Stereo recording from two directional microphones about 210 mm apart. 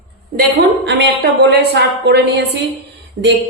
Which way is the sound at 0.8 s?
55° right (ahead or behind).